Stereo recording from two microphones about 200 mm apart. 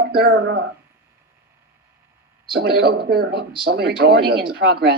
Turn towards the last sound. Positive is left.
turn(degrees=-55)  # may be behind; listen again after turning